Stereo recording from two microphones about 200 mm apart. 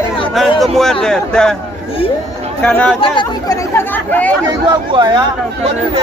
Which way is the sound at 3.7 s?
10° left (ahead or behind).